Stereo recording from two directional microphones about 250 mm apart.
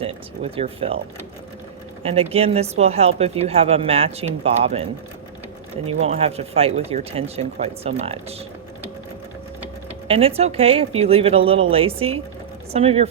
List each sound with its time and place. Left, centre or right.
0.0 s speech: right
2.0 s speech: right
10.1 s speech: right